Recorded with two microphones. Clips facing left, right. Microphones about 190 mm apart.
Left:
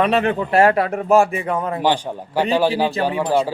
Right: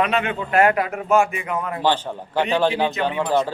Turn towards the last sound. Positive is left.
turn(degrees=10)  # may be behind; listen again after turning